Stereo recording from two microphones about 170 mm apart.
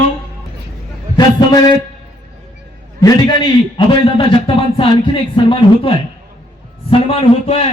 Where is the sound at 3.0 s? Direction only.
25° left (ahead or behind).